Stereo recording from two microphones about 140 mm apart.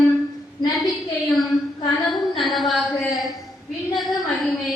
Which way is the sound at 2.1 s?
Centre (ahead or behind).